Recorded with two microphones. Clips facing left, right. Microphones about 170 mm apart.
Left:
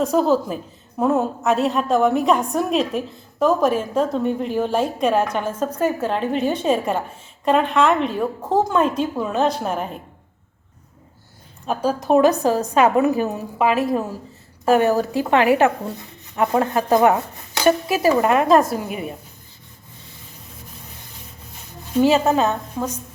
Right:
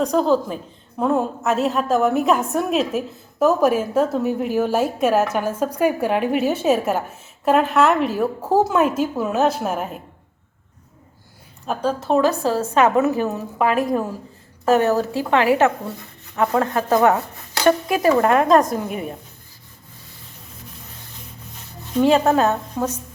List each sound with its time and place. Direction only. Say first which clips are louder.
0.0 s a woman's voice: even; 5° left (ahead or behind)
11.6 s a woman's voice: left 1 dB; centre (ahead or behind)
11.9 s a woman's voice: left 3 dB; 15° left (ahead or behind)
13.6 s a woman's voice: even; centre (ahead or behind)
14.6 s a woman's voice: even; 15° left (ahead or behind)
17.6 s a woman's voice: even; 5° left (ahead or behind)
21.9 s a woman's voice: even; 5° left (ahead or behind)